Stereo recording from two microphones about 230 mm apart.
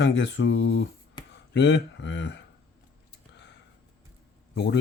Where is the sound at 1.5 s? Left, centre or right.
Left.